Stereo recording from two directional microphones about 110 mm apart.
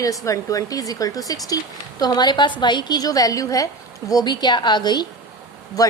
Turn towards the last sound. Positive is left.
turn(degrees=35)  # may be behind; listen again after turning